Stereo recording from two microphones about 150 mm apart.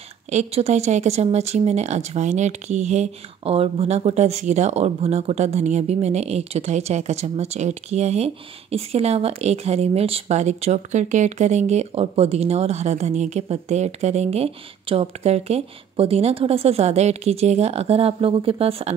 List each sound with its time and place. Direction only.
0.3 s speech: 45° right (ahead or behind)